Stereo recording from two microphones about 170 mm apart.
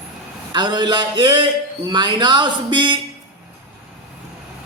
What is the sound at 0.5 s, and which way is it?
Speech, 25° right (ahead or behind).